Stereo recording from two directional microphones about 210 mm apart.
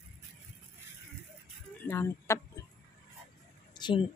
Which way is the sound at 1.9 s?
15° left (ahead or behind).